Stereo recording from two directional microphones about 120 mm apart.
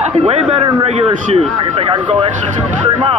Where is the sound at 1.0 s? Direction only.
45° right (ahead or behind).